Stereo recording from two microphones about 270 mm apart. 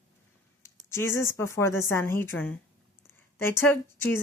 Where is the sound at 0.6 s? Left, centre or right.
Centre.